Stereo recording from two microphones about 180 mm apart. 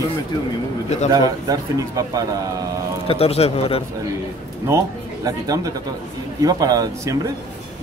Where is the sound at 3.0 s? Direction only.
30° left (ahead or behind).